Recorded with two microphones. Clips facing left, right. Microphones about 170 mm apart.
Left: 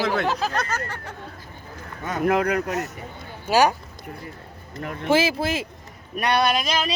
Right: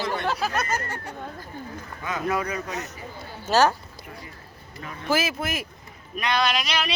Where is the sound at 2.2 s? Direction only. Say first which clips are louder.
Left 7 dB; 65° left (ahead or behind).